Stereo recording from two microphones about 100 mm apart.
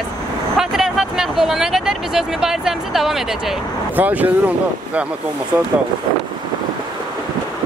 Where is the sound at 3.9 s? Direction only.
15° right (ahead or behind).